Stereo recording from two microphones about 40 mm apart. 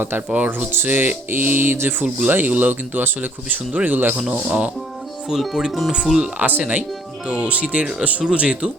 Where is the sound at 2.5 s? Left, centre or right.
Right.